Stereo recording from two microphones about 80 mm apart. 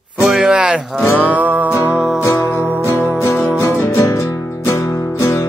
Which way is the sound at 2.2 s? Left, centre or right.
Left.